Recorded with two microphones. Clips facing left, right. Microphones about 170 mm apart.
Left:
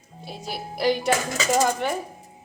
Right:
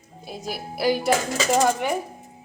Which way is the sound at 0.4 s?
5° right (ahead or behind).